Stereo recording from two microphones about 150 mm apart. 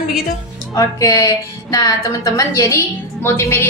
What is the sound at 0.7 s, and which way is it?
A woman's voice, 20° left (ahead or behind).